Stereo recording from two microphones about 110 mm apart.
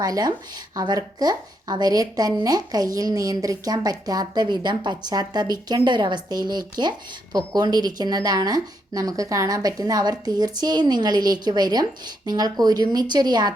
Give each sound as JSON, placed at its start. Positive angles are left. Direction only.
{"t": 0.0, "sound": "a woman's voice", "side_deg": -35}